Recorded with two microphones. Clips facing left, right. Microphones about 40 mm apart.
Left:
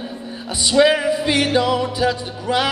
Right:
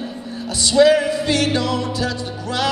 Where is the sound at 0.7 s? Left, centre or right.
Centre.